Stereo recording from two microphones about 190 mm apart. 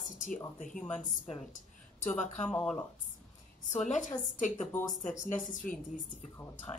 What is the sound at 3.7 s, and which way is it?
Speech, 40° left (ahead or behind).